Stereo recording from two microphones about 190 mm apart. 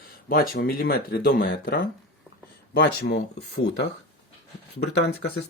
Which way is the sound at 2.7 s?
65° left (ahead or behind).